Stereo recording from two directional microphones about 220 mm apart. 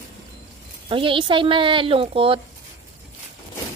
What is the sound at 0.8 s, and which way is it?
Speech, 25° right (ahead or behind).